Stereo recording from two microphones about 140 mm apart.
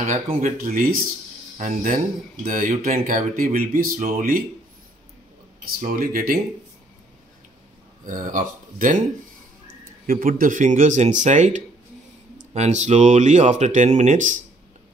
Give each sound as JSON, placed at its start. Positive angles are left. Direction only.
{"t": 0.0, "sound": "speech", "side_deg": -65}
{"t": 5.8, "sound": "speech", "side_deg": -80}
{"t": 8.0, "sound": "speech", "side_deg": -70}
{"t": 9.7, "sound": "speech", "side_deg": -85}